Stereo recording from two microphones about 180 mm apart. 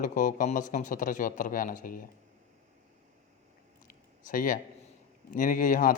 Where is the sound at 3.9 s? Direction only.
50° left (ahead or behind).